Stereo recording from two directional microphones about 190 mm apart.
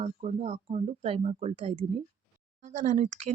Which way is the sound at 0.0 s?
35° right (ahead or behind).